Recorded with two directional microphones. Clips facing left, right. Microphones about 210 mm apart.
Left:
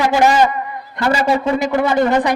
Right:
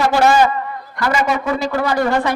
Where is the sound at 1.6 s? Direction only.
20° left (ahead or behind).